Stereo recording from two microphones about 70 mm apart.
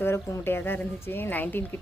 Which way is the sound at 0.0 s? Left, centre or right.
Left.